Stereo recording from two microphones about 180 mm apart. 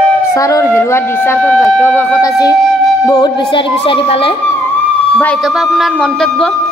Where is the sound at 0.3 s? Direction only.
20° left (ahead or behind).